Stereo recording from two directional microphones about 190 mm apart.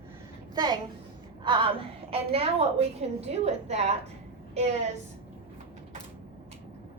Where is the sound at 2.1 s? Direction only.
30° right (ahead or behind).